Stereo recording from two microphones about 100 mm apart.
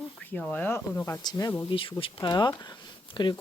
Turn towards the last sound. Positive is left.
turn(degrees=45)  # may be behind; listen again after turning